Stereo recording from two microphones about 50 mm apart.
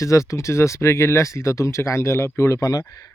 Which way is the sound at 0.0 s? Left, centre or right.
Left.